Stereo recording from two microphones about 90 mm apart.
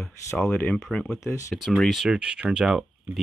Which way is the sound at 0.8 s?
10° left (ahead or behind).